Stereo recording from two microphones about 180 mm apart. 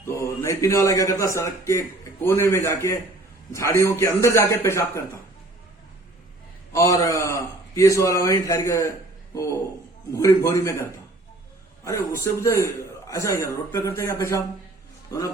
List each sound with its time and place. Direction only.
0.0 s a man's voice: 15° left (ahead or behind)
6.7 s a man's voice: 20° left (ahead or behind)
11.9 s a man's voice: 15° left (ahead or behind)